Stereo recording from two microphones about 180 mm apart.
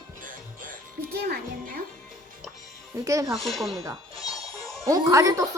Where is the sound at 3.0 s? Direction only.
20° right (ahead or behind).